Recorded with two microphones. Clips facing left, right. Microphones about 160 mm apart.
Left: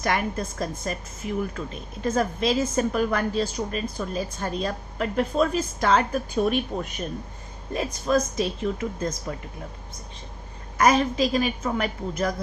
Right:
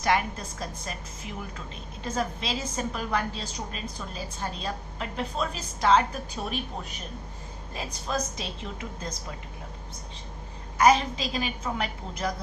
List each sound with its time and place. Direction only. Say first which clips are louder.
0.0 s a woman's voice: left 1 dB; 55° left (ahead or behind)
7.7 s a woman's voice: left 9 dB; 55° left (ahead or behind)
10.8 s a woman's voice: left 2 dB; 50° left (ahead or behind)